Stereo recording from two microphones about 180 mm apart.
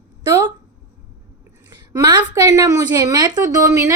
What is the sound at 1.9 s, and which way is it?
A woman's voice, 20° right (ahead or behind).